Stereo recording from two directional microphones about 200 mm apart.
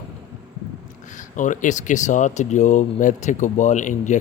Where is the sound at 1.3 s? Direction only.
40° left (ahead or behind).